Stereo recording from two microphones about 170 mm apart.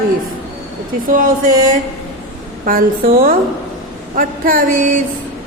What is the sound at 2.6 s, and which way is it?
Speech, 60° right (ahead or behind).